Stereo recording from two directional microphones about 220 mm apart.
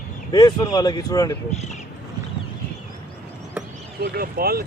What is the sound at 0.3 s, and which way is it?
Speech, 20° left (ahead or behind).